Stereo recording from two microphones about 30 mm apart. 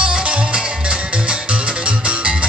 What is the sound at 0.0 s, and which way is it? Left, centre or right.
Music, right.